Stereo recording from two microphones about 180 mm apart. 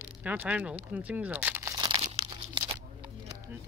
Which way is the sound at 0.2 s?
10° right (ahead or behind).